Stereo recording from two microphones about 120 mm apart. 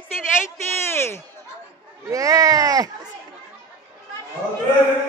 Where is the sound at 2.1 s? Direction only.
30° right (ahead or behind).